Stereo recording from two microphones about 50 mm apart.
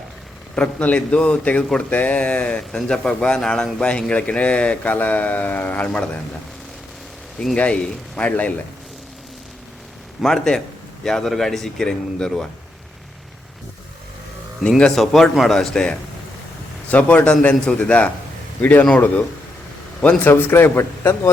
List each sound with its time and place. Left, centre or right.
0.5 s a man's voice: left
2.7 s speech: centre; by 5.9 s left
7.5 s a man's voice: left
10.2 s speech: centre
14.9 s speech: centre
16.9 s a man's voice: left
20.3 s a man's voice: left